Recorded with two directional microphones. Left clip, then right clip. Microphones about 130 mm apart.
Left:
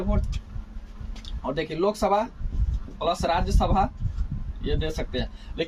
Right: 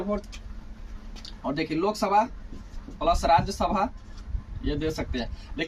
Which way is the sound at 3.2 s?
35° left (ahead or behind).